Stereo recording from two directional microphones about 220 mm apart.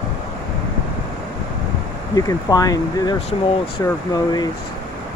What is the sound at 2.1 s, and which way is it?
Speech, 15° left (ahead or behind).